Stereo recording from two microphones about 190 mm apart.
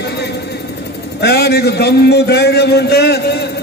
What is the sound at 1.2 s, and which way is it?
A man's voice, 55° left (ahead or behind).